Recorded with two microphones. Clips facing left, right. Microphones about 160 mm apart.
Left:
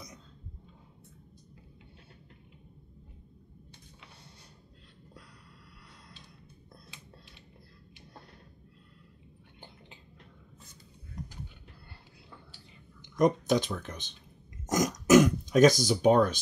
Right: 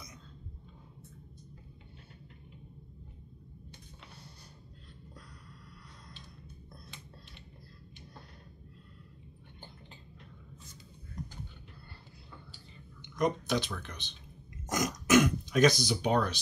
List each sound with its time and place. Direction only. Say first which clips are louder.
13.2 s speech: left 5 dB; 45° left (ahead or behind)
14.7 s throat clearing: left 5 dB; 40° left (ahead or behind)